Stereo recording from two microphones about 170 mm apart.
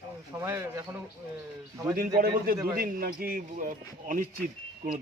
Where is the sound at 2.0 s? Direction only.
60° right (ahead or behind).